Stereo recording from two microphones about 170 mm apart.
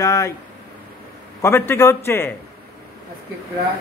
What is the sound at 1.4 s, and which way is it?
Speech, 15° left (ahead or behind).